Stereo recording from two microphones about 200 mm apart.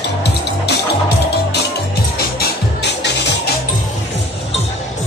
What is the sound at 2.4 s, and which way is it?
Music, 60° left (ahead or behind).